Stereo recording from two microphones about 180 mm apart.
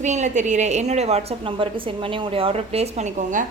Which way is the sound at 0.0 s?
40° right (ahead or behind).